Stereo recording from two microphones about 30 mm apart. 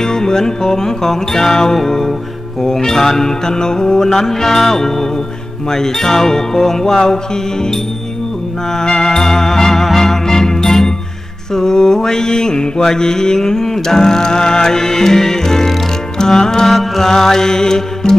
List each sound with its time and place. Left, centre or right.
0.0 s music: left
8.7 s music: left
11.5 s mantra: centre
16.2 s music: centre